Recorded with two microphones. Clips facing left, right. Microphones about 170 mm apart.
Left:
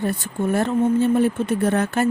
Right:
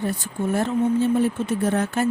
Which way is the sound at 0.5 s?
60° left (ahead or behind).